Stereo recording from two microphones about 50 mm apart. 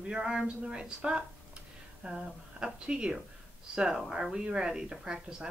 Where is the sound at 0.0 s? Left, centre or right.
Centre.